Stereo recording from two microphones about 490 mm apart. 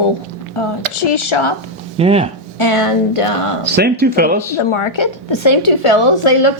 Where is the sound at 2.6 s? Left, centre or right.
Left.